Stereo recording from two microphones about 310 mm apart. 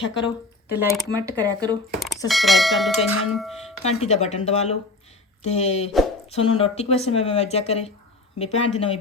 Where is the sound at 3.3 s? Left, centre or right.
Centre.